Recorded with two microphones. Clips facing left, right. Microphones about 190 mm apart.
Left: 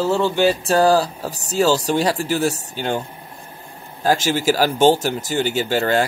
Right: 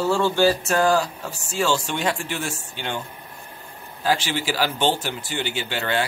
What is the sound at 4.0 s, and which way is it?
Speech, 45° left (ahead or behind).